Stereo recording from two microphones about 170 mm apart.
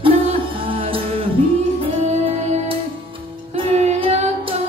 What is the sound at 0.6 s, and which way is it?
Music, 30° right (ahead or behind).